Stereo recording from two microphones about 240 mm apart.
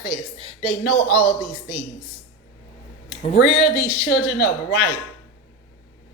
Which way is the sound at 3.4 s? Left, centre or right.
Left.